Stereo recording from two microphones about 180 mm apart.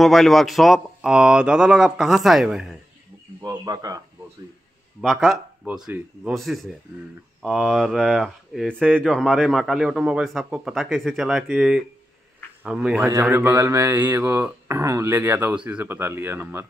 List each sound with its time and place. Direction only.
0.0 s speech: centre (ahead or behind)
3.3 s speech: 20° right (ahead or behind)
5.0 s speech: centre (ahead or behind)